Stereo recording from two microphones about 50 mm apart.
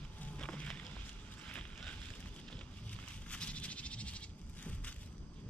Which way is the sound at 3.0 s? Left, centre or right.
Left.